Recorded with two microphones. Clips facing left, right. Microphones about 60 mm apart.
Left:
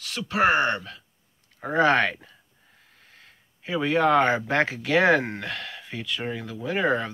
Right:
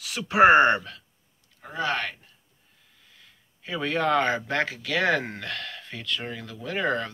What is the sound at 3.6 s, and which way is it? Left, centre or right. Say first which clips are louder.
Speech: left 4 dB; centre.